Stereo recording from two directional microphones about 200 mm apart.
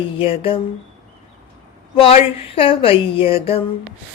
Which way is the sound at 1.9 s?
30° left (ahead or behind).